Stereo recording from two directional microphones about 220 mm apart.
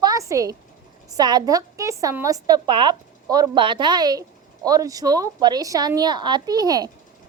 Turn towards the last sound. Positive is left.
turn(degrees=-15)  # may be behind; listen again after turning